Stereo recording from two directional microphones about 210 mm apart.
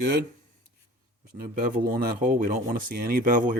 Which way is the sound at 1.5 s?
45° right (ahead or behind).